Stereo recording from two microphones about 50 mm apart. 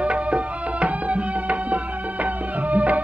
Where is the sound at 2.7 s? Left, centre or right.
Right.